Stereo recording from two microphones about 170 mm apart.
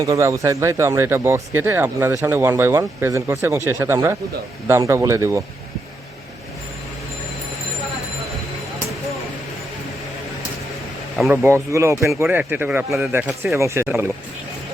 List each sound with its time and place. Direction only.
0.0 s speech: 20° right (ahead or behind)
11.3 s speech: 15° right (ahead or behind)